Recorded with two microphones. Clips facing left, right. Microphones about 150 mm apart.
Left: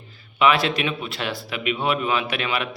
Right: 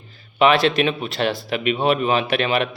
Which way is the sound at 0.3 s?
30° right (ahead or behind).